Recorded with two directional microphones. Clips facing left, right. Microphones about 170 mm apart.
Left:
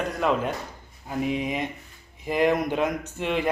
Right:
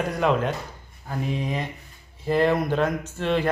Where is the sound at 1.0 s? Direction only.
15° left (ahead or behind).